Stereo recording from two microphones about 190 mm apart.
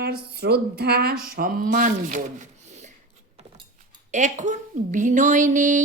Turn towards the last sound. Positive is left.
turn(degrees=-40)  # may be behind; listen again after turning